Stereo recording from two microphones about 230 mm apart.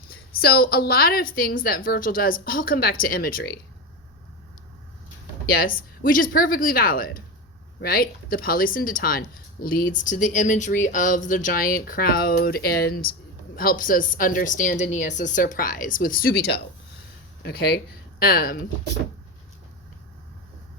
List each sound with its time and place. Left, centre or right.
0.1 s speech: left
5.5 s speech: left